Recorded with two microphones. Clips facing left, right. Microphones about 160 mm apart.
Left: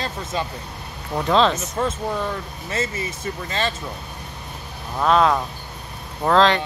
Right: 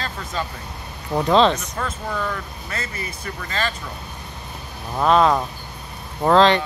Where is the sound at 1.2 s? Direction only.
Centre (ahead or behind).